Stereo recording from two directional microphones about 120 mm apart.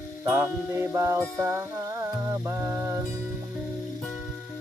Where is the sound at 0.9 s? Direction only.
25° right (ahead or behind).